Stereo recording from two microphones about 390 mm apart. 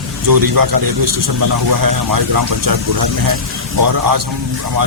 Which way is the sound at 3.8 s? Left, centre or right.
Right.